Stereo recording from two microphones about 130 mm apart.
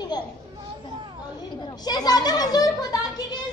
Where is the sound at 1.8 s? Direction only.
30° left (ahead or behind).